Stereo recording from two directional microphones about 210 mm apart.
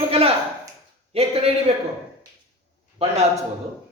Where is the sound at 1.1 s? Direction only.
30° right (ahead or behind).